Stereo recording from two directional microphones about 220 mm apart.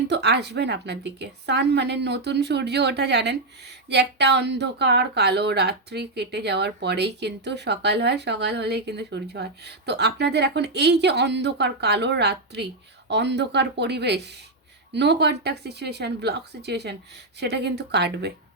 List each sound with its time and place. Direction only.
0.1 s speech: 50° right (ahead or behind)